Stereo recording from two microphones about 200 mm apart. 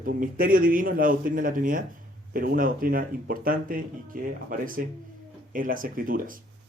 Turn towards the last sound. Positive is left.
turn(degrees=-45)  # may be behind; listen again after turning